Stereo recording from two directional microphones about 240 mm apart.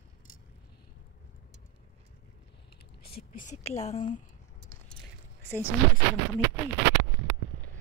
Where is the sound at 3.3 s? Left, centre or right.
Left.